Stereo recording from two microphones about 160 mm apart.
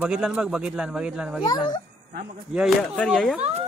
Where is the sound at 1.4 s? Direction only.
25° left (ahead or behind).